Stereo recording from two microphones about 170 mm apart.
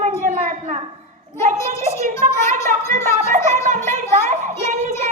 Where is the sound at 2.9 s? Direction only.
45° right (ahead or behind).